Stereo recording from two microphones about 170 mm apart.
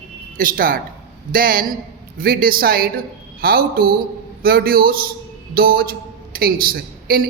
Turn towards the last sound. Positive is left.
turn(degrees=-60)  # may be behind; listen again after turning